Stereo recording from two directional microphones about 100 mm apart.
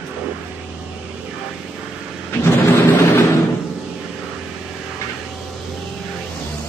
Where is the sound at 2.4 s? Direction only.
25° left (ahead or behind).